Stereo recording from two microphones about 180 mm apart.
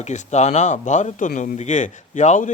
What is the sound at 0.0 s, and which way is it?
A man's voice, 40° left (ahead or behind).